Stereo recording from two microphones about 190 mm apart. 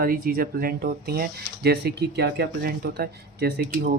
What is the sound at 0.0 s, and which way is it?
Speech, 50° right (ahead or behind).